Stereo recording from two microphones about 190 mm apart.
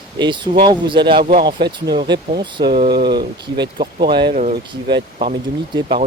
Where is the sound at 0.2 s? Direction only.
25° right (ahead or behind).